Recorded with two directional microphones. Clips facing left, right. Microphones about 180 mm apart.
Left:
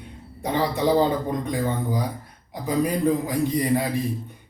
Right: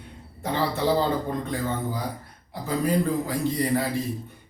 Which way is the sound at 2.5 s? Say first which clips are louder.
Left 1 dB; 15° left (ahead or behind).